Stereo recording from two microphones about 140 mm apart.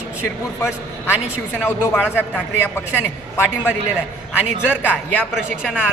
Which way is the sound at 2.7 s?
15° left (ahead or behind).